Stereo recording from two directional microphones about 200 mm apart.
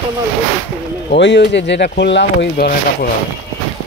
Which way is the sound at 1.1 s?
60° left (ahead or behind).